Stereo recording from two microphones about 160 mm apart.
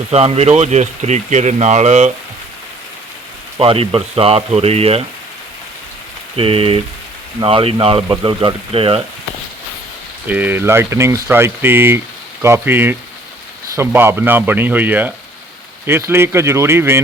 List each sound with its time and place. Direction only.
0.1 s speech: 40° right (ahead or behind)
3.6 s speech: 35° right (ahead or behind)
6.3 s speech: 35° right (ahead or behind)
10.2 s speech: 10° right (ahead or behind)